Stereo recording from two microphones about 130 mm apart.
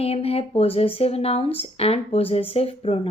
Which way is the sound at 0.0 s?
50° left (ahead or behind).